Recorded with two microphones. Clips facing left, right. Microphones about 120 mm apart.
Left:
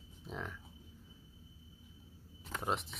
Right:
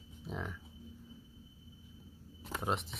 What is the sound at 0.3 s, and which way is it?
Livestock, 5° right (ahead or behind).